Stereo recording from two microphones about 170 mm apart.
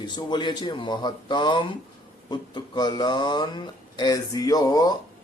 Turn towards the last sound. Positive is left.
turn(degrees=20)  # may be behind; listen again after turning